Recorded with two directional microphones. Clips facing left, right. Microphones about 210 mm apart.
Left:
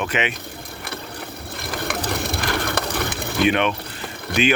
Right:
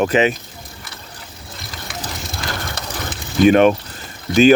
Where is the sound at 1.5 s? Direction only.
60° left (ahead or behind).